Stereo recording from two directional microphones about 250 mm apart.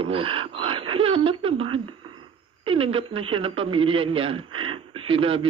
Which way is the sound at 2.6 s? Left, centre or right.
Right.